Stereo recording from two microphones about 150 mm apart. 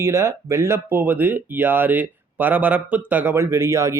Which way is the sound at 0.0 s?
20° right (ahead or behind).